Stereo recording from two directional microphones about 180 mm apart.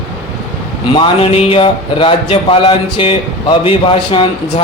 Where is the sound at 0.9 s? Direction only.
30° left (ahead or behind).